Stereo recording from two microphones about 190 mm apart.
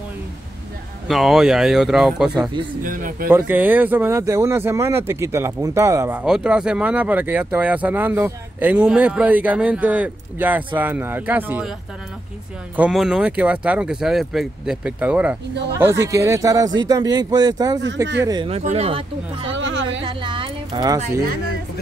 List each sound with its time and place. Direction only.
1.0 s speech: centre (ahead or behind)
2.8 s speech: 45° right (ahead or behind)
3.3 s speech: 10° right (ahead or behind)
12.7 s speech: 5° right (ahead or behind); by 18.5 s 20° right (ahead or behind)
18.5 s speech: 35° right (ahead or behind)
19.5 s a sound: 75° right (ahead or behind)
20.0 s a sound: 25° right (ahead or behind)